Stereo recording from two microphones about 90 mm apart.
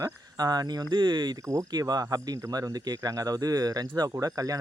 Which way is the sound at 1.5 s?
40° right (ahead or behind).